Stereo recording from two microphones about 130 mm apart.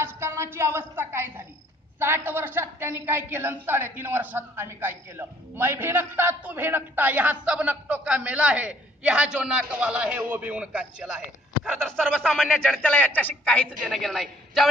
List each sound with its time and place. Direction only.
0.0 s a woman's voice: 20° right (ahead or behind); by 13.7 s 10° left (ahead or behind)
13.9 s a man's voice: centre (ahead or behind)